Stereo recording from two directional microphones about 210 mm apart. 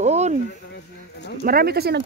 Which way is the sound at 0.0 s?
30° right (ahead or behind).